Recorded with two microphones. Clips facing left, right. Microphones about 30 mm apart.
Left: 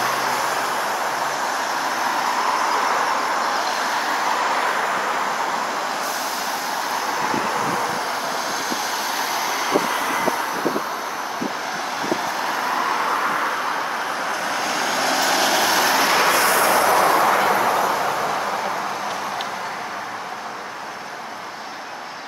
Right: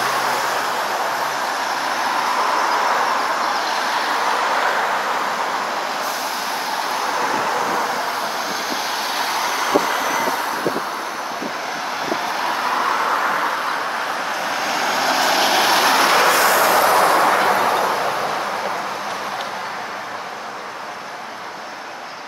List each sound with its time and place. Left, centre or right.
0.0 s vehicle: right
1.5 s vehicle: right
8.9 s vehicle: right
12.4 s vehicle: right
12.6 s vehicle: right
14.5 s vehicle: centre
15.7 s vehicle: right
17.8 s vehicle: right